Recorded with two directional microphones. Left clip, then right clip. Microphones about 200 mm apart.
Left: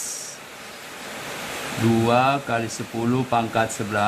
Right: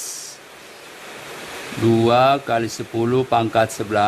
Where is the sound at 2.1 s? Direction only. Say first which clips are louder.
Right 4 dB; 45° right (ahead or behind).